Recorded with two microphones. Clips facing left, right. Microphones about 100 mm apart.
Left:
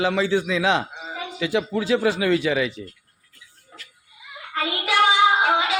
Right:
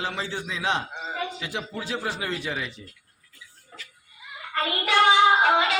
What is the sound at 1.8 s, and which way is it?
Speech, 90° left.